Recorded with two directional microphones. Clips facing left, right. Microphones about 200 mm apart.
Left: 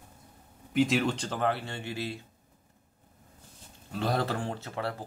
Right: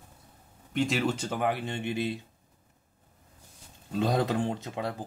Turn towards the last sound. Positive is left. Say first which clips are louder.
# right 1 dB
turn(degrees=-15)  # may be behind; listen again after turning